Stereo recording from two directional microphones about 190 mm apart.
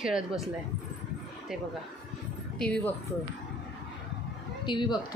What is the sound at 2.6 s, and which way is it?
Speech, 5° left (ahead or behind).